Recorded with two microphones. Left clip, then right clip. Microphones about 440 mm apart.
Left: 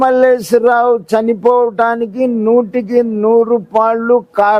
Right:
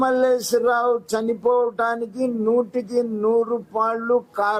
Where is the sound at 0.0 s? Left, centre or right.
Left.